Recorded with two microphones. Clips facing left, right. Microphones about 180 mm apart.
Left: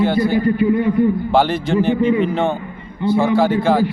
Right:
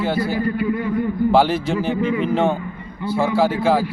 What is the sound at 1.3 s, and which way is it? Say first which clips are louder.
A man's voice: left 1 dB; 5° right (ahead or behind).